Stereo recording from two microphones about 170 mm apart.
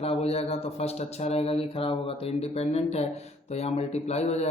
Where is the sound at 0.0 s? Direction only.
35° left (ahead or behind).